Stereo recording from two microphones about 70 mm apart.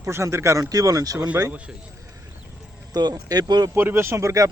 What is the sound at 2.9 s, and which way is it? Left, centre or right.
Speech, right.